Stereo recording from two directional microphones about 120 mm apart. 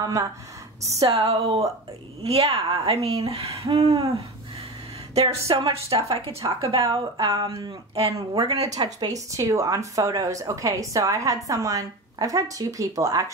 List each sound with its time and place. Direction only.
0.0 s a woman's voice: 25° right (ahead or behind)
1.0 s a woman's voice: 55° right (ahead or behind)
5.1 s a woman's voice: 60° right (ahead or behind)
8.1 s speech: 30° right (ahead or behind)